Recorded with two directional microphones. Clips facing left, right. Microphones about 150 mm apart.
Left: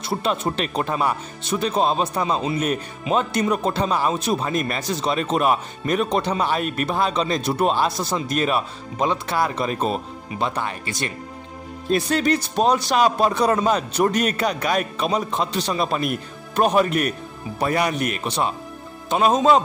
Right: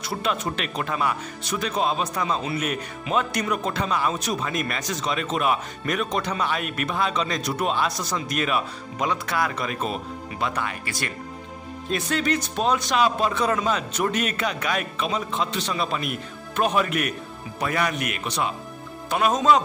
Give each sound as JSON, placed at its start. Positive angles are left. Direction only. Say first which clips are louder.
{"t": 0.0, "sound": "speech", "louder": "left 3 dB", "side_deg": 30}
{"t": 11.9, "sound": "speech", "louder": "left 5 dB", "side_deg": 35}